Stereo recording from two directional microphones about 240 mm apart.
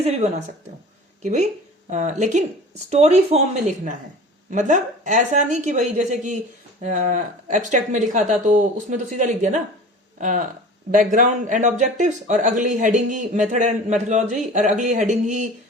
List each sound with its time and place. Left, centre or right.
0.0 s speech: right